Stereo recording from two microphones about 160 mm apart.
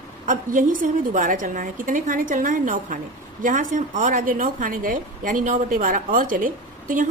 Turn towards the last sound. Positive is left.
turn(degrees=-55)  # may be behind; listen again after turning